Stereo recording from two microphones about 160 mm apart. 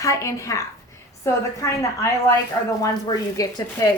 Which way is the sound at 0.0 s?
20° left (ahead or behind).